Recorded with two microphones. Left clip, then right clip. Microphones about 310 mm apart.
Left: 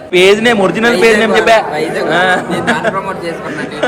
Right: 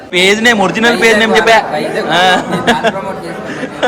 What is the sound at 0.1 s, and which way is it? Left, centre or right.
A man's voice, centre.